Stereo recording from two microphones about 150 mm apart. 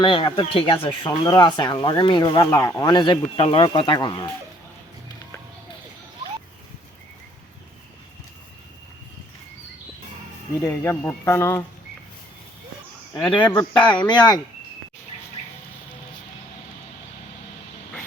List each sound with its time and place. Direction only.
0.0 s speech: 35° left (ahead or behind)
10.6 s speech: 15° left (ahead or behind)
13.1 s speech: 10° left (ahead or behind)
14.0 s speech: 30° left (ahead or behind)